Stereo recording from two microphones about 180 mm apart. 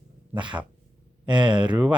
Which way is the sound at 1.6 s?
5° right (ahead or behind).